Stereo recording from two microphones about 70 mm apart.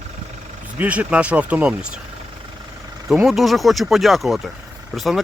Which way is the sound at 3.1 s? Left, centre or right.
Centre.